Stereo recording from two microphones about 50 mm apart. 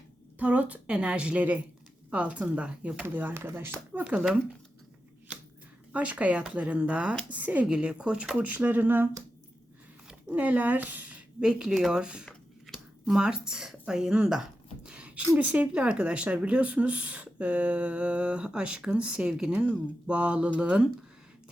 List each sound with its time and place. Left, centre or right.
0.3 s speech: right
4.0 s speech: right
5.9 s speech: right
8.4 s speech: right
10.2 s speech: right
11.3 s speech: centre
12.7 s a sound: centre
13.1 s speech: centre
14.8 s a sound: right
15.4 s speech: right; by 19.6 s centre
20.1 s speech: right